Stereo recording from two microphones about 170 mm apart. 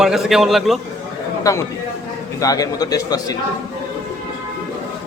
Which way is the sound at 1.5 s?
20° left (ahead or behind).